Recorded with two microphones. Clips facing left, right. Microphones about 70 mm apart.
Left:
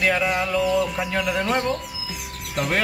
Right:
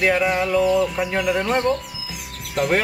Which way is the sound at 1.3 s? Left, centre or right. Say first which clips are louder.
Right 2 dB; centre.